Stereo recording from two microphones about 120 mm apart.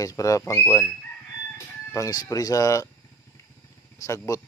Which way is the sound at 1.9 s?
30° left (ahead or behind).